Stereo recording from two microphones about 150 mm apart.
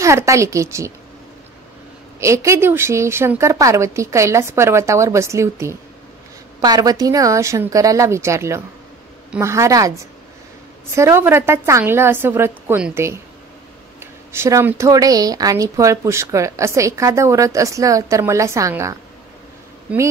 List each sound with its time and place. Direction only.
0.0 s speech: 20° right (ahead or behind)
2.1 s a woman's voice: 20° right (ahead or behind)